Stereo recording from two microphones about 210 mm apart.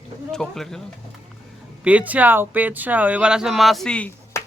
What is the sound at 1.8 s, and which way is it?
Speech, 5° right (ahead or behind).